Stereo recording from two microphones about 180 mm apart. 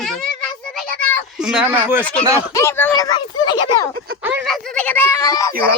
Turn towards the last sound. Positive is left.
turn(degrees=20)  # may be behind; listen again after turning